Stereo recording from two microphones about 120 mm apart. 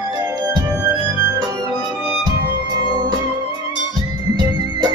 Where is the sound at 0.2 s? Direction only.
30° right (ahead or behind).